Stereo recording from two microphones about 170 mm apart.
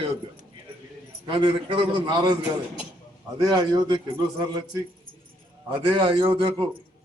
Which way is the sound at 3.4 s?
25° right (ahead or behind).